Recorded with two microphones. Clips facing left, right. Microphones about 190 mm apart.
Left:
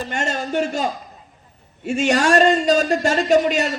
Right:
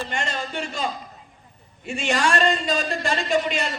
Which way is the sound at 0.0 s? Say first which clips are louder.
Left 4 dB; 45° left (ahead or behind).